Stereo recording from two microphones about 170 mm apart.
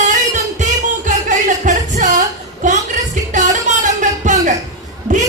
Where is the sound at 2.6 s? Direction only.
45° right (ahead or behind).